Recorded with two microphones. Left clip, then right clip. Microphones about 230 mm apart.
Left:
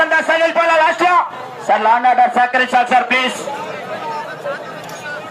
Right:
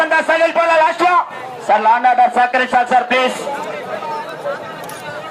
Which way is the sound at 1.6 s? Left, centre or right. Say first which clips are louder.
Even; left.